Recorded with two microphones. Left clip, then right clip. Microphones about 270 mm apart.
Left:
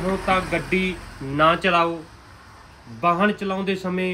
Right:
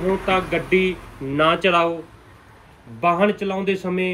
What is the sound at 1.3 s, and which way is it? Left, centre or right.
Speech, centre.